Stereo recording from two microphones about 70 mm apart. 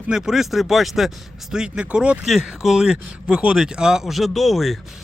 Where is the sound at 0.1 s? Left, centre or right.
Centre.